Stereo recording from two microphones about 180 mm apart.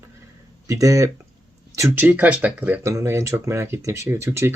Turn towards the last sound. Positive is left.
turn(degrees=-15)  # may be behind; listen again after turning